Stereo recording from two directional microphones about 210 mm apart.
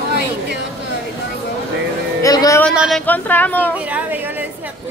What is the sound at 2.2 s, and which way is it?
Speech, 15° left (ahead or behind).